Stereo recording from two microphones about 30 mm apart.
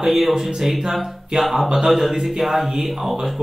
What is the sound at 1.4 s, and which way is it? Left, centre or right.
Music, centre.